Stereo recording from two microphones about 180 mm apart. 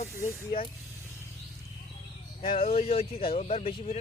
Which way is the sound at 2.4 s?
30° left (ahead or behind).